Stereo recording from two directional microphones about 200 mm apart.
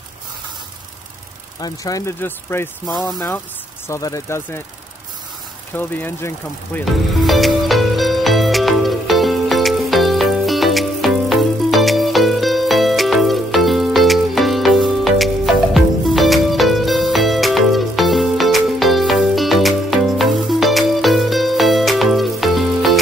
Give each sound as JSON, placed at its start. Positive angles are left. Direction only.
{"t": 1.6, "sound": "speech", "side_deg": 15}
{"t": 5.7, "sound": "speech", "side_deg": 10}
{"t": 7.2, "sound": "music", "side_deg": 0}